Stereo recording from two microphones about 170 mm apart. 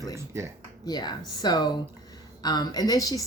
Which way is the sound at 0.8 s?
25° left (ahead or behind).